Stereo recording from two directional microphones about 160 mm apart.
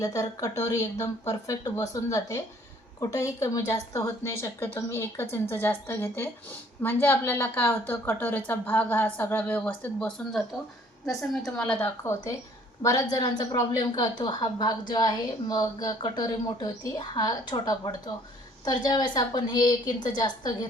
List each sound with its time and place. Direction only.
0.0 s a woman's voice: 20° left (ahead or behind)